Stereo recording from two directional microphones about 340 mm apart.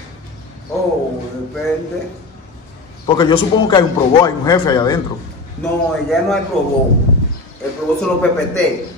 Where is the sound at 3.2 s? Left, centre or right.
Centre.